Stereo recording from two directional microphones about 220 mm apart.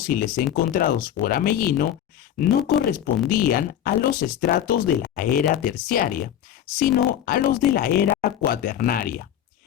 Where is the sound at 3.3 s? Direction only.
40° left (ahead or behind).